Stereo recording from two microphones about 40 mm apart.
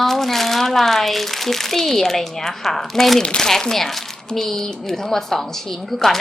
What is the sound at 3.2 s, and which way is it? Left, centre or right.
Speech, centre.